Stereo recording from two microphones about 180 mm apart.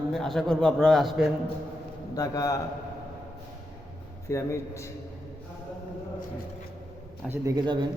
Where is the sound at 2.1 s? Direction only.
20° left (ahead or behind).